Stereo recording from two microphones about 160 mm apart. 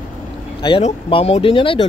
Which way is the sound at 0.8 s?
40° left (ahead or behind).